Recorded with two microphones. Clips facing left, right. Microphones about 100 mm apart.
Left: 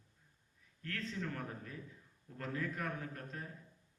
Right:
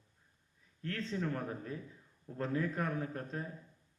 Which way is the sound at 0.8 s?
30° right (ahead or behind).